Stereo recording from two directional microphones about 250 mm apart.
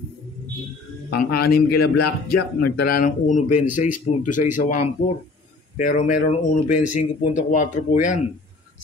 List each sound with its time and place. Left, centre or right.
1.1 s a man's voice: left